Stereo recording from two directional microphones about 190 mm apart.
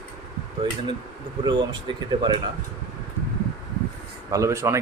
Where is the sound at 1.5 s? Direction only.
25° right (ahead or behind).